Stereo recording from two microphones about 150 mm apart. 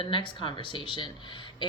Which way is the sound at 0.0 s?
35° left (ahead or behind).